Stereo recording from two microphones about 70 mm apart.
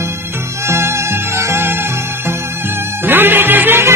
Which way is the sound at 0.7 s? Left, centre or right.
Right.